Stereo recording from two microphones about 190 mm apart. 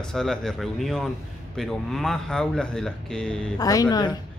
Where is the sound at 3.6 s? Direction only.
20° left (ahead or behind).